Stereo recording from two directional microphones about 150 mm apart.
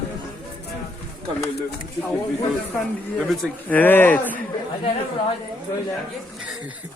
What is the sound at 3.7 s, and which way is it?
Speech, 15° left (ahead or behind).